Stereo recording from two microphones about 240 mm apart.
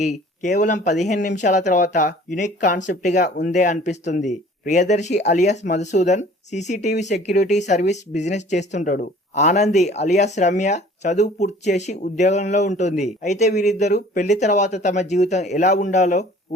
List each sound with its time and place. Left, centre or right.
0.0 s speech: left